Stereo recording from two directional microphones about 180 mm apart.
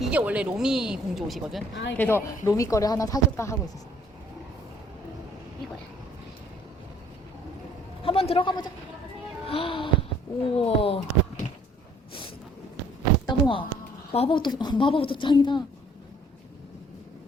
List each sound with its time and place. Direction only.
0.0 s speech: 10° right (ahead or behind)
1.7 s speech: 75° left (ahead or behind)
2.0 s speech: 10° left (ahead or behind)
8.0 s a sound: 30° left (ahead or behind)
9.5 s speech: 30° left (ahead or behind)
13.2 s a sound: 30° left (ahead or behind)
14.1 s a woman's voice: 30° left (ahead or behind)